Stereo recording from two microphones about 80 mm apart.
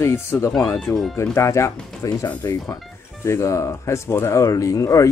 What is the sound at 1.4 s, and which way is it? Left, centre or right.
Speech, left.